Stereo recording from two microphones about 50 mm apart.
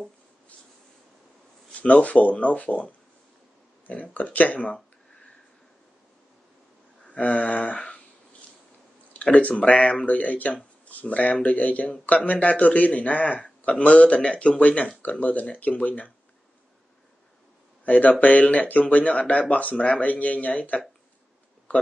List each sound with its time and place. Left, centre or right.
1.7 s speech: left
7.1 s a sound: left
9.1 s speech: left
17.8 s speech: left